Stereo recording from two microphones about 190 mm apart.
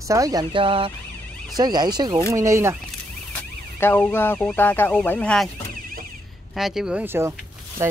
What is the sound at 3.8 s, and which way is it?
Speech, 10° left (ahead or behind).